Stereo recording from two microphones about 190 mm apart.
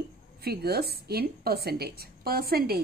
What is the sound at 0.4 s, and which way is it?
A woman's voice, 55° right (ahead or behind).